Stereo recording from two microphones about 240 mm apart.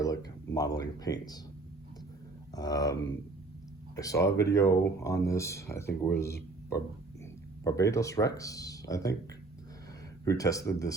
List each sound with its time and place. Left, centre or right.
0.0 s a sound: centre
0.8 s speech: centre
2.6 s speech: centre
3.9 s speech: centre
10.2 s speech: centre